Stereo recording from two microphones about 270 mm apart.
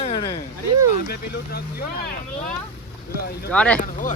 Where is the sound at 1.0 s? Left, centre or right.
Left.